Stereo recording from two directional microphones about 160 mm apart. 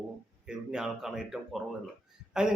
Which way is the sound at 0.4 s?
5° right (ahead or behind).